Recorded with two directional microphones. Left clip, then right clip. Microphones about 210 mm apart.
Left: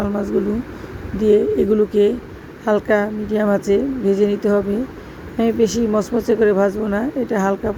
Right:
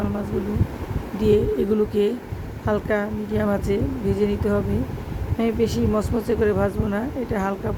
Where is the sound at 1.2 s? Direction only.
10° left (ahead or behind).